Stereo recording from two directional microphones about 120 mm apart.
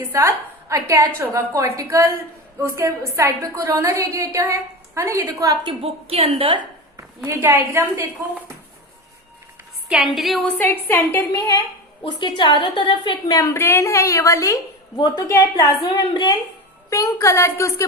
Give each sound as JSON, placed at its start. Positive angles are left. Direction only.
{"t": 0.1, "sound": "a woman's voice", "side_deg": -20}
{"t": 5.8, "sound": "a woman's voice", "side_deg": -55}
{"t": 7.3, "sound": "a woman's voice", "side_deg": -20}
{"t": 9.9, "sound": "a woman's voice", "side_deg": 0}
{"t": 10.6, "sound": "a woman's voice", "side_deg": 20}
{"t": 12.0, "sound": "a woman's voice", "side_deg": 40}
{"t": 13.3, "sound": "a woman's voice", "side_deg": 25}
{"t": 16.9, "sound": "a woman's voice", "side_deg": 25}